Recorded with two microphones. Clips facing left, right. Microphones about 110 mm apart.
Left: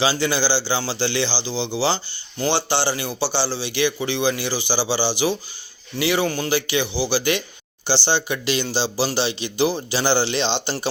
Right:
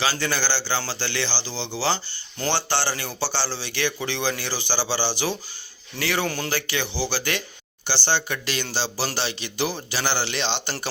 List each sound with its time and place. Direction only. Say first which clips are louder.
0.0 s a man's voice: left 5 dB; 20° left (ahead or behind)
6.2 s speech: left 4 dB; 5° left (ahead or behind)
6.5 s a man's voice: left 6 dB; 15° left (ahead or behind)